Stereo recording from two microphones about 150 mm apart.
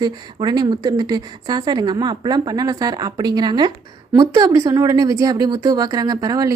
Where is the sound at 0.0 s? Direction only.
30° right (ahead or behind).